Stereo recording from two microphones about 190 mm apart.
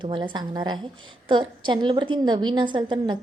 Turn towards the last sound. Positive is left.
turn(degrees=-25)  # may be behind; listen again after turning